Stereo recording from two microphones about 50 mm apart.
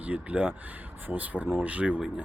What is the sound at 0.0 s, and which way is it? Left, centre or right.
Speech, right.